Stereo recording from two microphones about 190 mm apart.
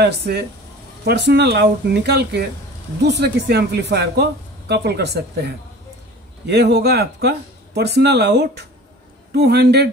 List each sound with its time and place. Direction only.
0.0 s speech: 60° right (ahead or behind)